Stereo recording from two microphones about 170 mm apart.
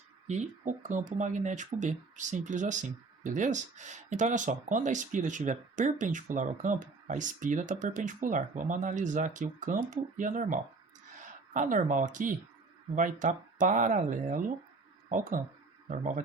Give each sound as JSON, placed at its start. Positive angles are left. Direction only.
{"t": 0.3, "sound": "speech", "side_deg": -45}